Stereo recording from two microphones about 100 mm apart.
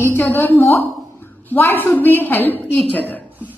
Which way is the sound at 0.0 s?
25° left (ahead or behind).